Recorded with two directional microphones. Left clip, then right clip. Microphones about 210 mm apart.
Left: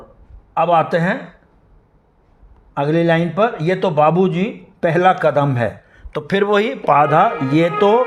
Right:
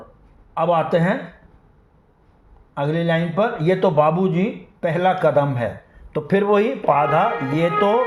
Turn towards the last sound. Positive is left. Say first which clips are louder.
# left 4 dB
turn(degrees=50)  # may be behind; listen again after turning